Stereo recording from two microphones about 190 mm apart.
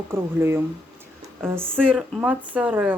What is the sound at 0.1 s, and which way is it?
Speech, 10° right (ahead or behind).